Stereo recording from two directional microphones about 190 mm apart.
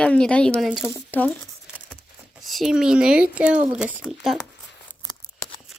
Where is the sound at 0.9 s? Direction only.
10° left (ahead or behind).